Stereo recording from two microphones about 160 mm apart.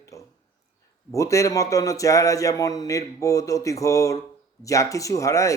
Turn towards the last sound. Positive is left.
turn(degrees=20)  # may be behind; listen again after turning